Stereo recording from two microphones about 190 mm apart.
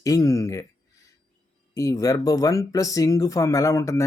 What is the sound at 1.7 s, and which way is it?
Speech, 15° left (ahead or behind).